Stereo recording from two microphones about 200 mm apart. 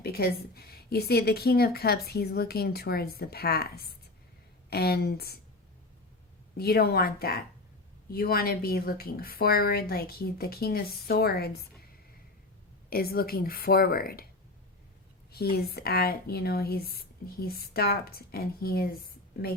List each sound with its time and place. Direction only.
0.0 s speech: 50° left (ahead or behind)
6.6 s speech: 50° left (ahead or behind)
12.9 s speech: 50° left (ahead or behind)
15.3 s speech: 50° left (ahead or behind)